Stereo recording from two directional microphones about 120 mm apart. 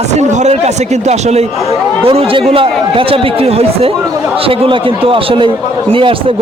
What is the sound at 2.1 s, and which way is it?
Speech, 55° right (ahead or behind).